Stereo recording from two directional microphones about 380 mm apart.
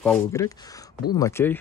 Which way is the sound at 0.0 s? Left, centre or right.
Centre.